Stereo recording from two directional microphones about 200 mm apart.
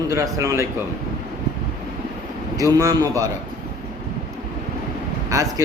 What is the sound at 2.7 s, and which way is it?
Speech, 15° right (ahead or behind).